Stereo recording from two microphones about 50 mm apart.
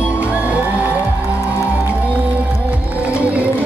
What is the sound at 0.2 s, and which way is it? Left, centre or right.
Music, right.